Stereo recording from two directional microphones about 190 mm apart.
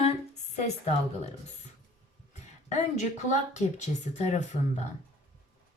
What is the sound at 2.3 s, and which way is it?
Speech, 40° left (ahead or behind).